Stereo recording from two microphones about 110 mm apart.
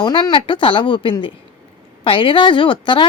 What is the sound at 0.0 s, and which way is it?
A woman's voice, 45° left (ahead or behind).